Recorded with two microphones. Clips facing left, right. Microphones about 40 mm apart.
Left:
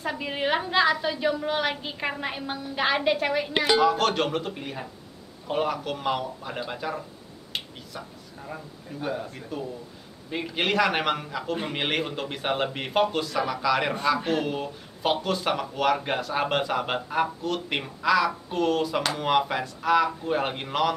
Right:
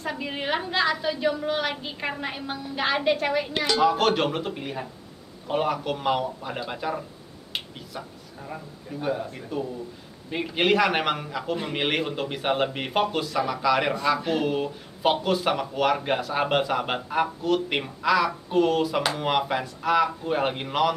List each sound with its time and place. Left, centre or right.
0.0 s speech: centre
3.5 s speech: centre
3.8 s speech: centre